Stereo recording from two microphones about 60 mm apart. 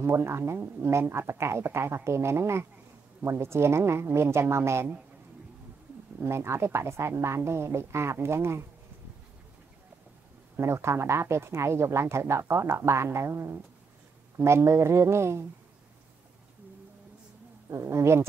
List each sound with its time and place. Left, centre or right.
0.0 s a woman's voice: right
6.2 s a woman's voice: right
10.5 s a woman's voice: right
17.6 s a woman's voice: right